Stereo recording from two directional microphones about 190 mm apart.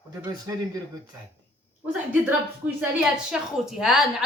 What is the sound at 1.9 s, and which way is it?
A woman's voice, 10° right (ahead or behind).